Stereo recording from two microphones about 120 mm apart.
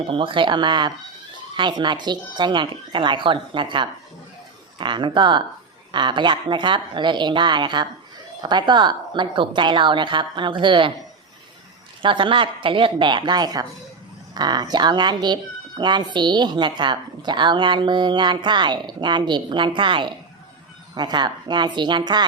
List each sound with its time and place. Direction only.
0.1 s speech: 45° right (ahead or behind)
12.0 s speech: 45° right (ahead or behind)